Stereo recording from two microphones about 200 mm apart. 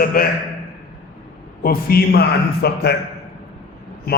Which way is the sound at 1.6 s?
50° left (ahead or behind).